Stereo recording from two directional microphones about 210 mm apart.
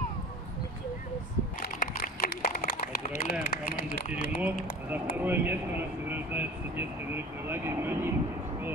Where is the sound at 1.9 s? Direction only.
45° left (ahead or behind).